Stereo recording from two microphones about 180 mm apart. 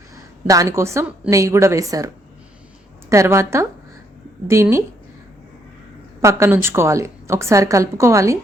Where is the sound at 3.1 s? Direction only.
15° right (ahead or behind).